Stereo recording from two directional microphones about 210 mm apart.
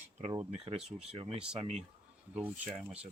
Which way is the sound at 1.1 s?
25° right (ahead or behind).